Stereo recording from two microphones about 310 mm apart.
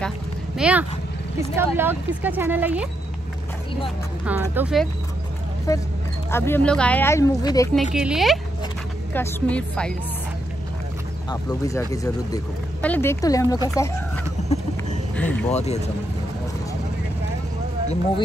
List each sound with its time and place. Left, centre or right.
0.6 s speech: centre
4.3 s speech: centre
5.7 s speech: centre
7.9 s speech: centre
11.2 s speech: centre
15.5 s speech: left